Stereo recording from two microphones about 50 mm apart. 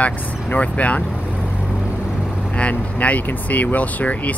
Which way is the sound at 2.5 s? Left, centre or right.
Left.